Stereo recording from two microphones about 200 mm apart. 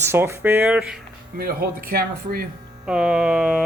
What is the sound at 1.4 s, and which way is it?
Speech, 45° right (ahead or behind).